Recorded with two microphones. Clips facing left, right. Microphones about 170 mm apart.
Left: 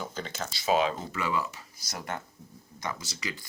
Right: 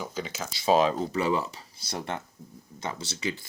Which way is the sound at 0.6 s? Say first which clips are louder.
Right 4 dB; 35° right (ahead or behind).